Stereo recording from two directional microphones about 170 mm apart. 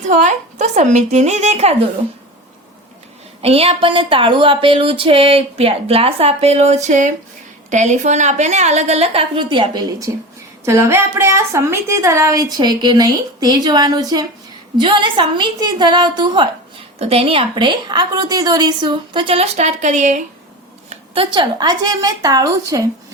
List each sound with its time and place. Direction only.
0.0 s a woman's voice: 45° right (ahead or behind)
3.4 s speech: 35° right (ahead or behind)
10.7 s a woman's voice: 15° right (ahead or behind); by 20.2 s 45° right (ahead or behind)
20.9 s a woman's voice: 30° right (ahead or behind)